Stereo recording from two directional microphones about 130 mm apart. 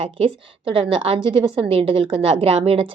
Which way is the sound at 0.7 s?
45° right (ahead or behind).